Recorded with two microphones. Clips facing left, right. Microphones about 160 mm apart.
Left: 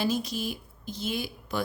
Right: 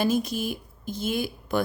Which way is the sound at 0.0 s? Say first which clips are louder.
Right 4 dB; 50° right (ahead or behind).